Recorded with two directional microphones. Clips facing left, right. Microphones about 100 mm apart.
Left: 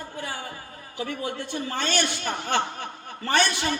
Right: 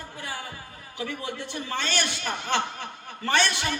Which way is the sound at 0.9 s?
40° left (ahead or behind).